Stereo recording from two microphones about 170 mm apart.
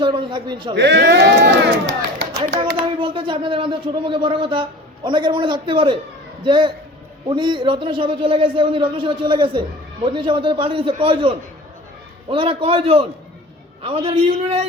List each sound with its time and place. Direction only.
0.0 s a man's voice: 30° right (ahead or behind)
0.8 s speech: 85° right
2.7 s a man's voice: 30° right (ahead or behind)